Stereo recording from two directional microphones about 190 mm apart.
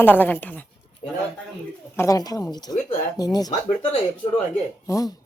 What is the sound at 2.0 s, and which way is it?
A woman's voice, 20° left (ahead or behind).